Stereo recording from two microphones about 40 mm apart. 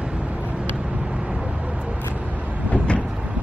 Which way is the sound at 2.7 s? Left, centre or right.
Left.